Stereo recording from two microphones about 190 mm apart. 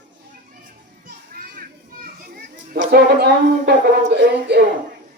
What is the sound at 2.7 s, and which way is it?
A man's voice, 60° right (ahead or behind).